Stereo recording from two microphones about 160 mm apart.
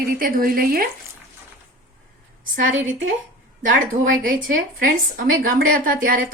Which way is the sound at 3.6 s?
60° right (ahead or behind).